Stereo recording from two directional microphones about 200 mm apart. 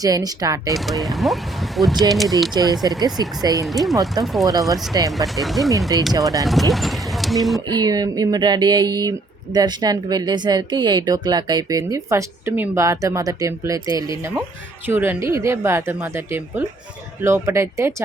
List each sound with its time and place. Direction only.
0.0 s a woman's voice: 20° right (ahead or behind)
0.9 s speech: centre (ahead or behind)
2.5 s speech: 20° right (ahead or behind)
3.7 s speech: centre (ahead or behind)
4.7 s a woman's voice: 20° right (ahead or behind)
5.1 s speech: centre (ahead or behind)
7.7 s a woman's voice: 20° right (ahead or behind)